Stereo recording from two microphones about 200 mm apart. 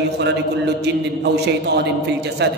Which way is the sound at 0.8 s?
55° right (ahead or behind).